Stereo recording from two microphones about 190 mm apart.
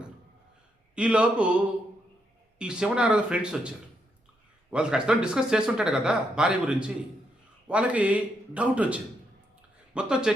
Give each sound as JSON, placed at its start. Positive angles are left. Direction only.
{"t": 0.9, "sound": "speech", "side_deg": -5}
{"t": 2.6, "sound": "speech", "side_deg": -5}
{"t": 4.7, "sound": "a man's voice", "side_deg": -5}